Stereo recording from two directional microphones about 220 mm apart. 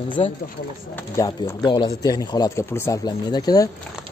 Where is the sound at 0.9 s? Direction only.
10° left (ahead or behind).